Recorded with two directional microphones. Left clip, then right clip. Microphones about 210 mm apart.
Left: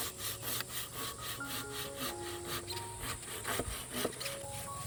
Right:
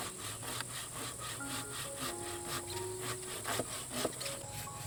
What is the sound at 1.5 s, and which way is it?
Music, 50° left (ahead or behind).